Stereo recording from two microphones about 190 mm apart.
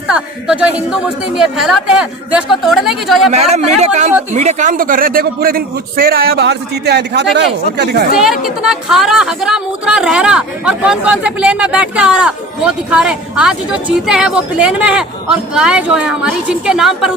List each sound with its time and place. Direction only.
0.1 s a woman's voice: 5° right (ahead or behind)
3.3 s a man's voice: 35° right (ahead or behind); by 8.0 s 60° right (ahead or behind)
8.1 s a woman's voice: centre (ahead or behind)